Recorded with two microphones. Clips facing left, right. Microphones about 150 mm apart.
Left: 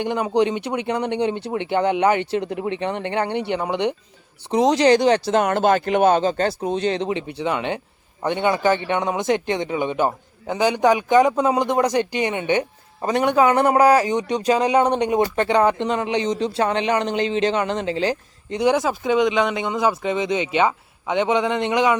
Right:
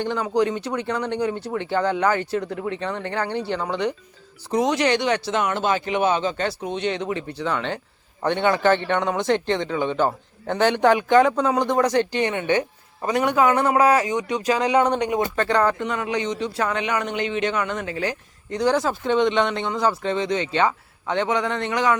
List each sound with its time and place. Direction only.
0.0 s speech: 15° left (ahead or behind)
4.4 s speech: 30° left (ahead or behind)
7.1 s a man's voice: 20° left (ahead or behind)
13.1 s speech: 30° left (ahead or behind)
15.4 s speech: 20° left (ahead or behind)
16.2 s a man's voice: 35° left (ahead or behind); by 21.9 s 20° left (ahead or behind)